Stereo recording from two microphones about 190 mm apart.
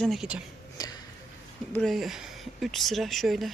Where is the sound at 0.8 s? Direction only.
20° left (ahead or behind).